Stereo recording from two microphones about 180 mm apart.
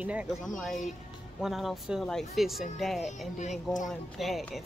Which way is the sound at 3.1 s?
40° left (ahead or behind).